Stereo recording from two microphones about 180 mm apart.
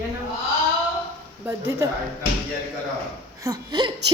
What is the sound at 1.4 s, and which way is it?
Speech, 15° right (ahead or behind).